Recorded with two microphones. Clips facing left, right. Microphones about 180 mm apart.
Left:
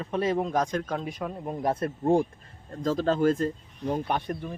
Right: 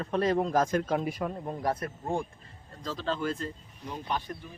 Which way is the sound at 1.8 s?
35° left (ahead or behind).